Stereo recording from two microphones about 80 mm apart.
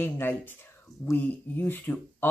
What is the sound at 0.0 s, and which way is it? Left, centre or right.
Speech, left.